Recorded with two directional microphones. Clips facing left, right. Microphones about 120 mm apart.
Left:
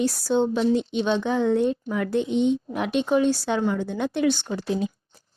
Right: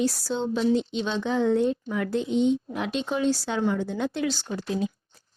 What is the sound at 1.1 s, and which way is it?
A woman's voice, 15° left (ahead or behind).